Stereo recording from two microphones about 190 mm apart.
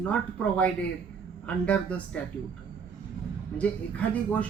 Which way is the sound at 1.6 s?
5° left (ahead or behind).